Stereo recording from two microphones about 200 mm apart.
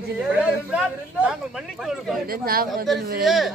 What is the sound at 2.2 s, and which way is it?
Speech, 45° right (ahead or behind).